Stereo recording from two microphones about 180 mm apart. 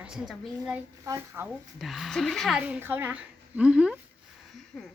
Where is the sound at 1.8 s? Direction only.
Centre (ahead or behind).